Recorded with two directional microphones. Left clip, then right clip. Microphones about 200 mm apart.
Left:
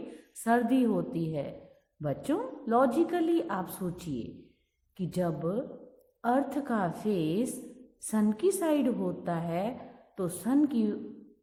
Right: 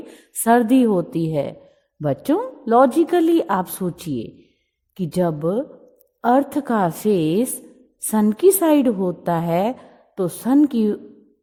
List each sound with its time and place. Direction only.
0.4 s a woman's voice: 45° right (ahead or behind)